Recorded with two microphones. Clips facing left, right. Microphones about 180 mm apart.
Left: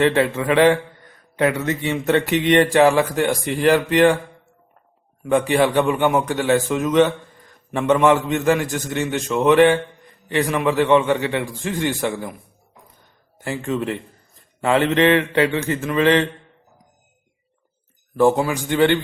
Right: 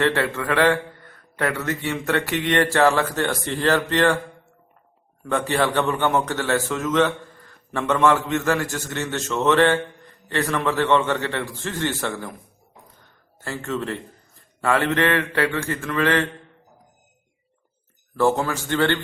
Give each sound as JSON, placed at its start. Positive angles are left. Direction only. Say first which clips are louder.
{"t": 0.0, "sound": "a man's voice", "louder": "left 4 dB", "side_deg": 20}
{"t": 5.2, "sound": "a man's voice", "louder": "left 5 dB", "side_deg": 15}
{"t": 13.4, "sound": "a man's voice", "louder": "left 4 dB", "side_deg": 15}
{"t": 18.2, "sound": "a man's voice", "louder": "left 4 dB", "side_deg": 15}